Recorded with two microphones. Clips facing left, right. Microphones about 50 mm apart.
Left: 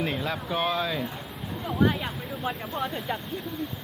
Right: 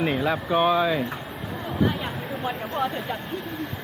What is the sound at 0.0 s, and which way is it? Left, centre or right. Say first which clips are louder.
Speech: right 5 dB; centre.